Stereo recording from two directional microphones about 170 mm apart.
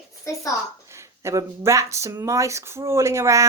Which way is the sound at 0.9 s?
15° right (ahead or behind).